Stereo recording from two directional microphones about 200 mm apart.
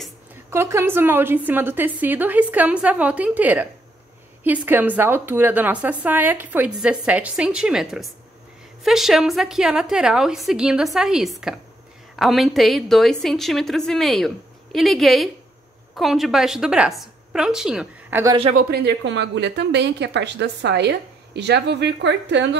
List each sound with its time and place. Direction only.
0.5 s a woman's voice: 15° right (ahead or behind)
18.2 s speech: 25° right (ahead or behind)
18.5 s a woman's voice: 50° right (ahead or behind)